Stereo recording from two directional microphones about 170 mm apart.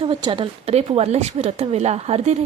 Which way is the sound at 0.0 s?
25° right (ahead or behind).